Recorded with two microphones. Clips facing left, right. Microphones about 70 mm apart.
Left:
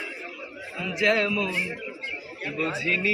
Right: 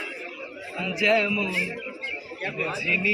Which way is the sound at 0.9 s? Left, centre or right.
Left.